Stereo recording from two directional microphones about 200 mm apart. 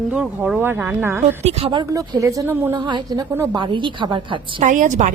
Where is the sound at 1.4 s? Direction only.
30° right (ahead or behind).